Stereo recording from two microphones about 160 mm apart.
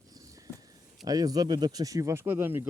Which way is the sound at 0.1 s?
20° right (ahead or behind).